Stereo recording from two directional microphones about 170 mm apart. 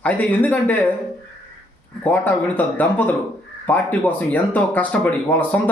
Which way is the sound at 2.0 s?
10° left (ahead or behind).